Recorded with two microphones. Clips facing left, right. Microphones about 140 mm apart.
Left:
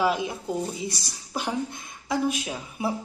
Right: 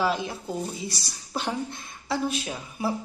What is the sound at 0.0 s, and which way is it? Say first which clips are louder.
Speech: left 2 dB; 15° left (ahead or behind).